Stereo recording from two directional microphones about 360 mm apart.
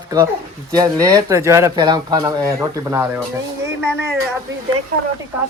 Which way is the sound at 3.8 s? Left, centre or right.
Right.